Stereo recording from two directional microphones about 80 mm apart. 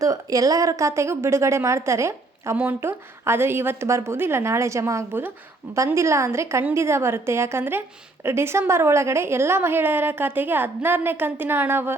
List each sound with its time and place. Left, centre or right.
0.0 s a woman's voice: right